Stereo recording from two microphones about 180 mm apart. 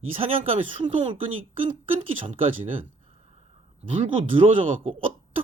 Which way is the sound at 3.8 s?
30° right (ahead or behind).